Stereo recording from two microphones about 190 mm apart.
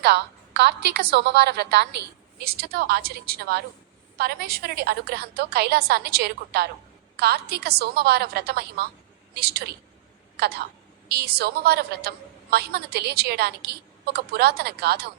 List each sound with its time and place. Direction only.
0.0 s a woman's voice: 60° right (ahead or behind)